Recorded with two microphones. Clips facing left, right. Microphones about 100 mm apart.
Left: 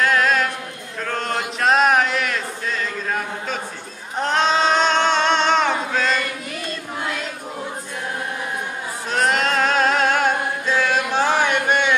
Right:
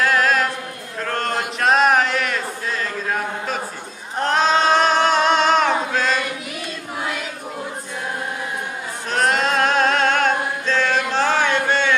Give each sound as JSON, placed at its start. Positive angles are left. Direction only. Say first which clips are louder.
{"t": 0.0, "sound": "a capella", "louder": "even", "side_deg": 0}
{"t": 1.0, "sound": "a sound", "louder": "right 1 dB", "side_deg": 0}
{"t": 4.2, "sound": "male singing", "louder": "right 1 dB", "side_deg": 0}
{"t": 7.0, "sound": "choir", "louder": "right 1 dB", "side_deg": -5}
{"t": 9.1, "sound": "chant", "louder": "right 1 dB", "side_deg": 0}